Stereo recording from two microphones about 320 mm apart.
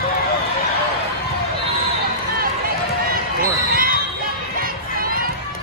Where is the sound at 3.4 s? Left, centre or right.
Right.